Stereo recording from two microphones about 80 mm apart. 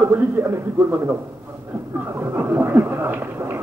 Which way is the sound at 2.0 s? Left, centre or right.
Right.